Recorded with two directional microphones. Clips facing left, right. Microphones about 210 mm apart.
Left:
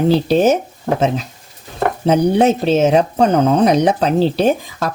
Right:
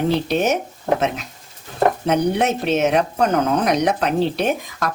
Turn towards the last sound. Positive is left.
turn(degrees=30)  # may be behind; listen again after turning